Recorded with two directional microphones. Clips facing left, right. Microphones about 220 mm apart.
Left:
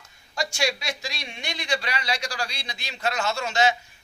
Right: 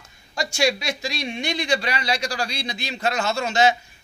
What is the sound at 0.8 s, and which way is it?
A man's voice, 20° right (ahead or behind).